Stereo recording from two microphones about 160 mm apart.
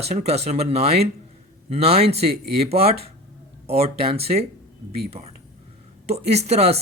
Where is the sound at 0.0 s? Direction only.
45° right (ahead or behind).